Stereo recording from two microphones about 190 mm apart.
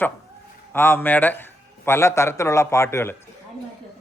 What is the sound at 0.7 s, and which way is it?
A woman's voice, 10° left (ahead or behind).